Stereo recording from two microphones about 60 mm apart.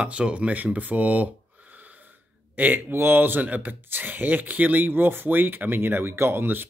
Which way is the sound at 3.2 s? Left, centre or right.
Right.